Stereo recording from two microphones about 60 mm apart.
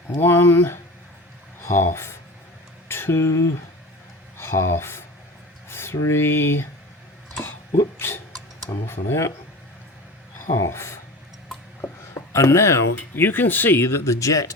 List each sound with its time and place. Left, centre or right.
0.1 s speech: left
2.9 s a sound: left
4.4 s speech: left
5.6 s a sound: left
6.1 s speech: left
7.9 s speech: left
10.5 s speech: left
12.3 s speech: left
13.1 s speech: left